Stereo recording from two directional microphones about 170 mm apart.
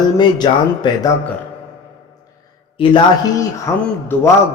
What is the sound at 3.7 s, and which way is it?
Speech, 20° left (ahead or behind).